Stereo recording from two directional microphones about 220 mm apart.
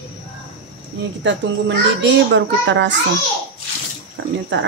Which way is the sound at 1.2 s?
55° right (ahead or behind).